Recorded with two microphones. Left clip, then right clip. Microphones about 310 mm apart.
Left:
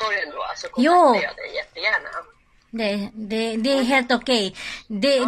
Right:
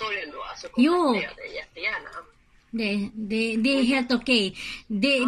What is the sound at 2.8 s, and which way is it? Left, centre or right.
A woman's voice, centre.